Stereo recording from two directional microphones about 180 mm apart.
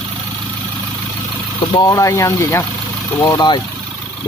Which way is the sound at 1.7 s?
20° left (ahead or behind).